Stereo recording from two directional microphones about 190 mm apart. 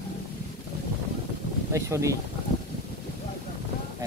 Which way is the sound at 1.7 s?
15° right (ahead or behind).